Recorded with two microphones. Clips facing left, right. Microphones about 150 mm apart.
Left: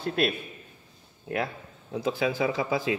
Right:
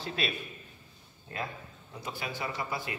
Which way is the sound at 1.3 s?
85° left.